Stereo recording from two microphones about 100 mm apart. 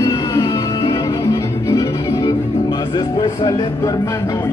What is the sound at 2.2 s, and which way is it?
Music, 45° left (ahead or behind).